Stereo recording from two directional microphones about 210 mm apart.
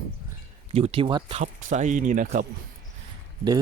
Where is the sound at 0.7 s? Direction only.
30° right (ahead or behind).